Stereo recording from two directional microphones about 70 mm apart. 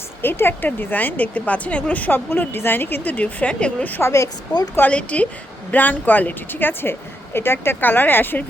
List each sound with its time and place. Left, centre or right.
0.2 s a woman's voice: left; by 3.8 s centre
4.0 s speech: left
4.9 s a woman's voice: centre